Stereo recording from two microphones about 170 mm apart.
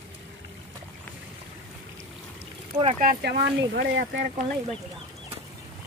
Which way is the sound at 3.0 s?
60° right (ahead or behind).